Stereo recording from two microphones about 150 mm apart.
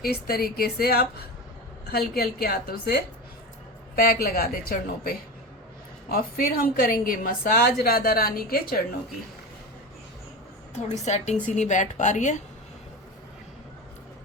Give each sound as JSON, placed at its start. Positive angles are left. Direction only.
{"t": 0.0, "sound": "a woman's voice", "side_deg": 85}
{"t": 11.0, "sound": "a woman's voice", "side_deg": 50}